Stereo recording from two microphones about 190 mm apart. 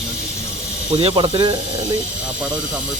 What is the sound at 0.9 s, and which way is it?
Speech, 30° right (ahead or behind).